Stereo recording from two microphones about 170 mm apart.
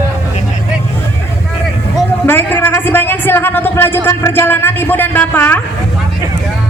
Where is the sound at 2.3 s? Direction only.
10° left (ahead or behind).